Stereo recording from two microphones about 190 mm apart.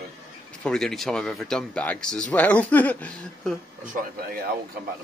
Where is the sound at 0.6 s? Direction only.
5° left (ahead or behind).